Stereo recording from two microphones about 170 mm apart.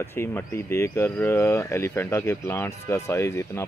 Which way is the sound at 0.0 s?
15° left (ahead or behind).